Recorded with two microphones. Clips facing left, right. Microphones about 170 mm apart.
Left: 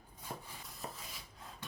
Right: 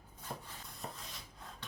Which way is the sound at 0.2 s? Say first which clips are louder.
Even; 5° left (ahead or behind).